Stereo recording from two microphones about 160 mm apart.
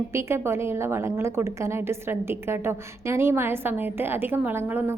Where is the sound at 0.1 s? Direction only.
15° right (ahead or behind).